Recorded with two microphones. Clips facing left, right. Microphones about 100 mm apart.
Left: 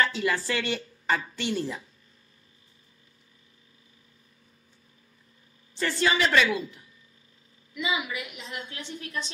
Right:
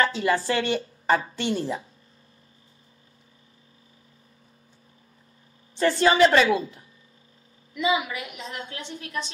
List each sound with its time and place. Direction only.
0.0 s a woman's voice: 35° right (ahead or behind)
5.8 s a woman's voice: 35° right (ahead or behind)